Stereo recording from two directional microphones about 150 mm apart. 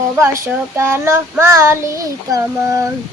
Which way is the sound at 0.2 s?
20° right (ahead or behind).